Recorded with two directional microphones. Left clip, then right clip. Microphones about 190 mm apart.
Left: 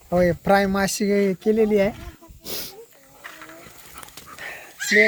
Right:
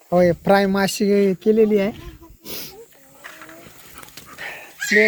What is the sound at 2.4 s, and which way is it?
Snake, 40° left (ahead or behind).